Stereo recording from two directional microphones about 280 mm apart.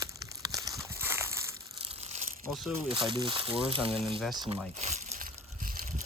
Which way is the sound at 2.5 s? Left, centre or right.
Centre.